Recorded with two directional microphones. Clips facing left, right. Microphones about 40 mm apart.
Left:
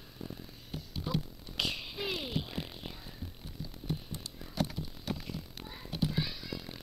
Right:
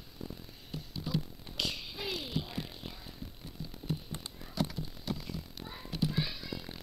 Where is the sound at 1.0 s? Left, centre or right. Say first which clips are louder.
Even; left.